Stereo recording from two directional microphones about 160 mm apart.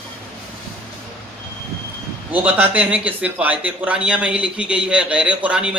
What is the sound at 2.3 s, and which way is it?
A man's voice, 10° right (ahead or behind).